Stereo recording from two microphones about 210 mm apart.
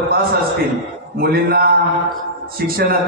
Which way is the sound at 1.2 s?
45° right (ahead or behind).